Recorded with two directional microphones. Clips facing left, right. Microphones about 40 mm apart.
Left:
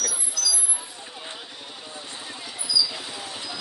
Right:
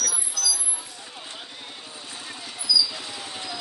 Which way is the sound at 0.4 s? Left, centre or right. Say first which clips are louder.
Left 1 dB; centre.